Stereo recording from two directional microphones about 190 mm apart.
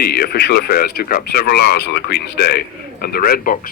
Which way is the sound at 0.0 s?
55° left (ahead or behind).